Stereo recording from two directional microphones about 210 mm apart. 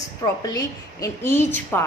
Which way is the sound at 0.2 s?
20° left (ahead or behind).